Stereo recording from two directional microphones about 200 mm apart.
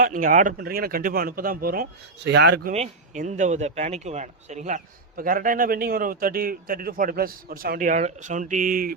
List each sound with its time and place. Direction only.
0.0 s speech: 40° right (ahead or behind); by 2.7 s 60° right (ahead or behind)
2.7 s speech: 35° right (ahead or behind)